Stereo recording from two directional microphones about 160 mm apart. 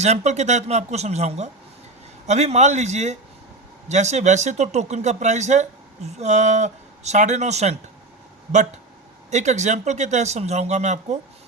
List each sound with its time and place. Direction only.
0.0 s speech: 45° right (ahead or behind)
9.3 s speech: 45° right (ahead or behind)